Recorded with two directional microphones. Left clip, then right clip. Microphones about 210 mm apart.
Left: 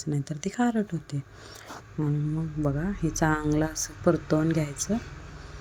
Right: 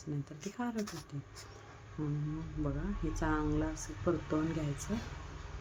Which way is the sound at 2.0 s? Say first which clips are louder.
Left 9 dB; 25° left (ahead or behind).